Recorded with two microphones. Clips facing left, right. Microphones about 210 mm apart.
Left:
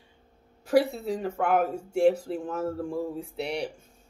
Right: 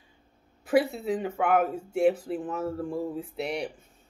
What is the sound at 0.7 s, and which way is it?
Speech, 5° right (ahead or behind).